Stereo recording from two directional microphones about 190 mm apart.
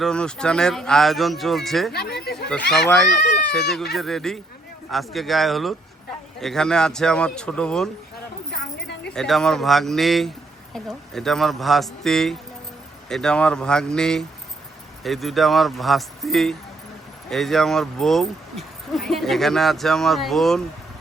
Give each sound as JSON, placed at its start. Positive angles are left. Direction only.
{"t": 0.0, "sound": "speech", "side_deg": 5}
{"t": 1.9, "sound": "speech", "side_deg": 55}
{"t": 2.5, "sound": "speech", "side_deg": 5}
{"t": 8.4, "sound": "a sound", "side_deg": 60}
{"t": 9.1, "sound": "speech", "side_deg": 0}